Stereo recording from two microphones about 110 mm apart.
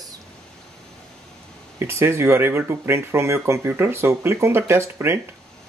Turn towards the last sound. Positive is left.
turn(degrees=-20)  # may be behind; listen again after turning